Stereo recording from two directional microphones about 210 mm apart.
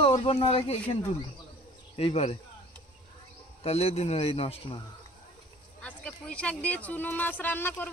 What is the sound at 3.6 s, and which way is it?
Speech, 30° left (ahead or behind).